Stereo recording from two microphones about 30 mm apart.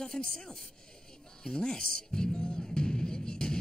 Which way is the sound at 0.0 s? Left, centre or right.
Left.